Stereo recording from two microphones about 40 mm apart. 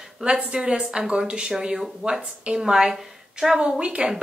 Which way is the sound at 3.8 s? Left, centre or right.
Right.